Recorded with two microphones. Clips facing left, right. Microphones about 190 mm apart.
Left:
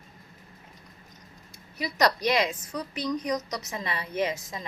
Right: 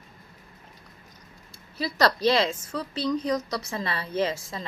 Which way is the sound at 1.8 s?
15° left (ahead or behind).